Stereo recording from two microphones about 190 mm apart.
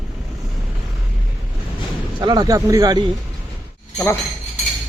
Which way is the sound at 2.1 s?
20° right (ahead or behind).